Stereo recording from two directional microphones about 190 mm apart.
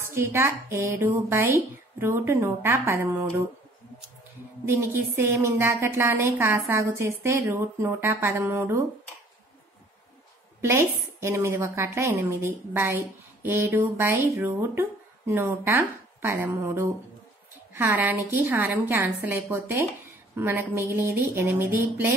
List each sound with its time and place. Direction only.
0.1 s a woman's voice: 15° right (ahead or behind)
4.6 s a woman's voice: 15° right (ahead or behind)
10.6 s a woman's voice: 15° right (ahead or behind)